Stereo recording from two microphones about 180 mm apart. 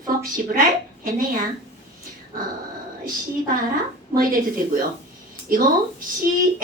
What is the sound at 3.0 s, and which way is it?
A woman's voice, 50° right (ahead or behind).